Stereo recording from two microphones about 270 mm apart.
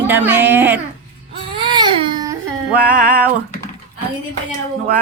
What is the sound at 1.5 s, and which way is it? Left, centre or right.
Baby cry, centre.